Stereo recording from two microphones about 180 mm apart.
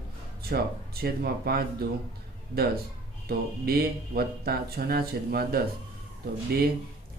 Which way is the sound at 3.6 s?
60° right (ahead or behind).